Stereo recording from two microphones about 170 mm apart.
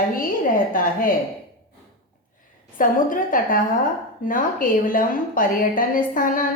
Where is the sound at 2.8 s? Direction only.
55° left (ahead or behind).